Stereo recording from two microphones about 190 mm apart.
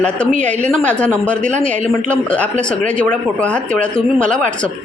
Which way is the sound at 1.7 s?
40° right (ahead or behind).